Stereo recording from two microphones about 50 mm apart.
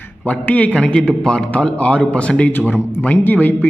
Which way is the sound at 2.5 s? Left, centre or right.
Left.